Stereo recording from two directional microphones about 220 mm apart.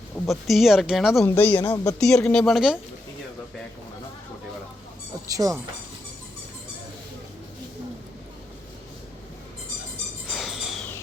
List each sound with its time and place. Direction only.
0.3 s speech: centre (ahead or behind)
2.0 s speech: centre (ahead or behind)
5.4 s speech: 15° right (ahead or behind)
10.3 s a sound: centre (ahead or behind)